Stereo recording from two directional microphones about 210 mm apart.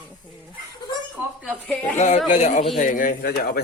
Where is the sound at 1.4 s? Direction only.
5° right (ahead or behind).